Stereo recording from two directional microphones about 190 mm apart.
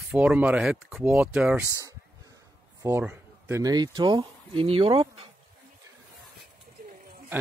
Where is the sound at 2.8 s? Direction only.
15° right (ahead or behind); by 5.3 s 30° right (ahead or behind).